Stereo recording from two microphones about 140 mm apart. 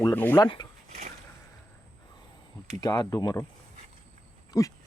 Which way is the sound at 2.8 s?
30° left (ahead or behind).